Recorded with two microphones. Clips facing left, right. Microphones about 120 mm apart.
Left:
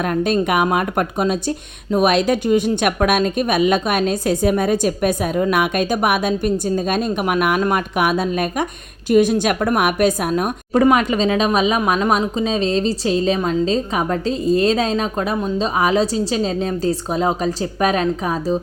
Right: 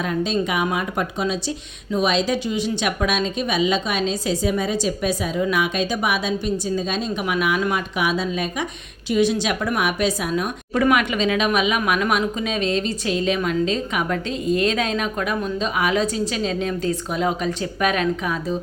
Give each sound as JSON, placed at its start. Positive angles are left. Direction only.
{"t": 0.0, "sound": "a woman's voice", "side_deg": 55}
{"t": 10.8, "sound": "a woman's voice", "side_deg": 35}